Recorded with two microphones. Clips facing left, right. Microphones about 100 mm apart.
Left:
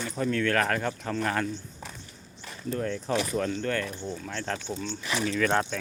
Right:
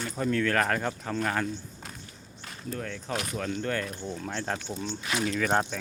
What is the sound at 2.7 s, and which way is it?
Speech, 10° left (ahead or behind).